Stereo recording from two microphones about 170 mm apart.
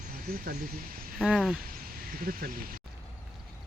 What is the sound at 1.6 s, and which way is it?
Speech, 60° right (ahead or behind).